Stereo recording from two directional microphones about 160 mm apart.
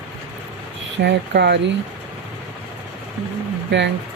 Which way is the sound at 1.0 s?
90° right.